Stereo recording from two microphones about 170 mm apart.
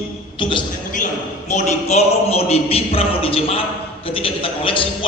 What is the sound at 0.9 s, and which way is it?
A man's voice, 45° left (ahead or behind).